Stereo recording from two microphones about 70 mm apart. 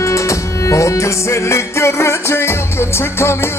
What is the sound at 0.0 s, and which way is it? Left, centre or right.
Music, left.